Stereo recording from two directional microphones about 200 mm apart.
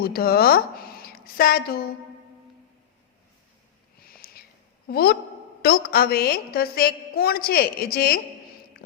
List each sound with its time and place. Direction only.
0.0 s a woman's voice: 50° left (ahead or behind)
4.0 s a sound: 50° left (ahead or behind)
4.9 s a woman's voice: 50° left (ahead or behind)